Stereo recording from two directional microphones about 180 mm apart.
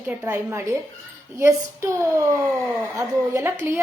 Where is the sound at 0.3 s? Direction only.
10° right (ahead or behind).